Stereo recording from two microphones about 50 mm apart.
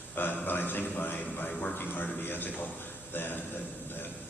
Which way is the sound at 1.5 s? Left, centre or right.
Left.